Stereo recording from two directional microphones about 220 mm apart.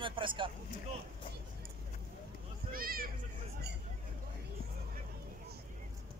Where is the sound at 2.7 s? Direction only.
40° right (ahead or behind).